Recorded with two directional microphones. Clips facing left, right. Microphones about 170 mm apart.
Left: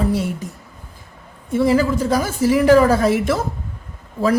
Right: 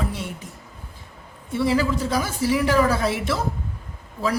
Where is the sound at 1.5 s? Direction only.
45° left (ahead or behind).